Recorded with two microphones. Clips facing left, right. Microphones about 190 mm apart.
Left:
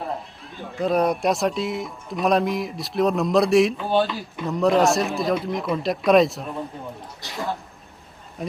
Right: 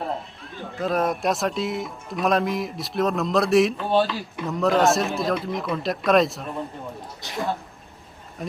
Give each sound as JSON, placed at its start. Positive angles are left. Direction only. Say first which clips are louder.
{"t": 0.6, "sound": "speech", "louder": "left 3 dB", "side_deg": 0}